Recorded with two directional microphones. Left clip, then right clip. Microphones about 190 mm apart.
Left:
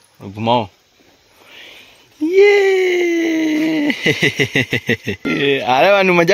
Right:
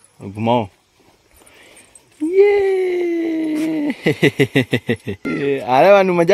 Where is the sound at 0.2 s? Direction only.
25° right (ahead or behind).